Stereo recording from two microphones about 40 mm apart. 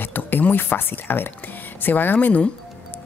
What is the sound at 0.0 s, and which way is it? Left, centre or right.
Speech, left.